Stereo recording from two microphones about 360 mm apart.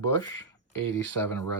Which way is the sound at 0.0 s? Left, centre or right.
Right.